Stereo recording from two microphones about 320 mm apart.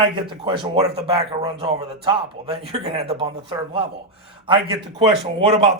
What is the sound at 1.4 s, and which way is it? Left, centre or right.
A man's voice, centre.